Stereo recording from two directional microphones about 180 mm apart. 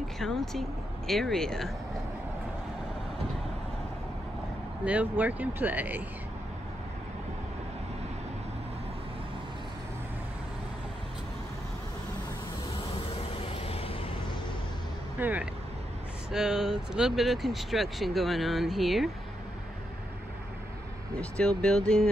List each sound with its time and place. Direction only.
0.2 s speech: centre (ahead or behind)
4.8 s speech: 10° right (ahead or behind)
13.5 s vehicle: 30° left (ahead or behind)
15.1 s speech: 10° right (ahead or behind)
21.2 s speech: 5° left (ahead or behind)